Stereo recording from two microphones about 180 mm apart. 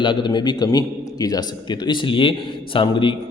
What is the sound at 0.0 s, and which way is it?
A man's voice, 25° left (ahead or behind).